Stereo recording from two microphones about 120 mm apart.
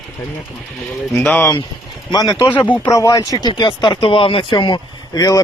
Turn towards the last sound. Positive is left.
turn(degrees=30)  # may be behind; listen again after turning